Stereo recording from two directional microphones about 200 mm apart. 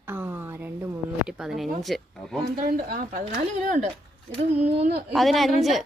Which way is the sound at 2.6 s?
45° right (ahead or behind).